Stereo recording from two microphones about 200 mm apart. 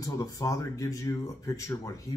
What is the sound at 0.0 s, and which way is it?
Speech, 15° left (ahead or behind).